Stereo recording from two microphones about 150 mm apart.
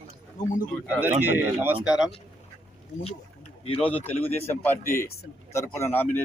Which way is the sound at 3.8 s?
10° left (ahead or behind).